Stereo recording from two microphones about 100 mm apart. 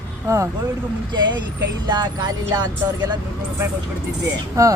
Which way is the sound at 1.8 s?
45° right (ahead or behind).